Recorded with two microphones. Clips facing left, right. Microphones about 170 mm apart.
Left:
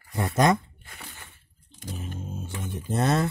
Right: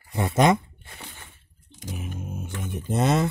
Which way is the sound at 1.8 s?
10° right (ahead or behind).